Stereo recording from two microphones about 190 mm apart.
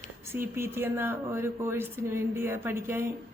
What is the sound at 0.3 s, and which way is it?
Speech, 15° right (ahead or behind).